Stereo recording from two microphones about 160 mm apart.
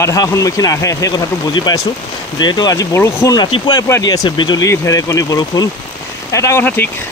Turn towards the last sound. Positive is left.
turn(degrees=15)  # may be behind; listen again after turning